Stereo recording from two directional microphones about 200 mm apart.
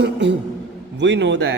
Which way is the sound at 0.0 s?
60° right (ahead or behind).